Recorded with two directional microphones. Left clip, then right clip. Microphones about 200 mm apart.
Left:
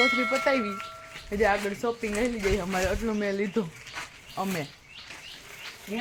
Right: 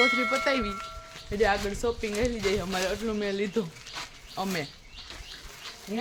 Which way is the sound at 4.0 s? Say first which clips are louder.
Left 1 dB; 15° left (ahead or behind).